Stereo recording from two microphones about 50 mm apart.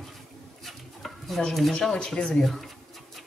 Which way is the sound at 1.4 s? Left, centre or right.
Centre.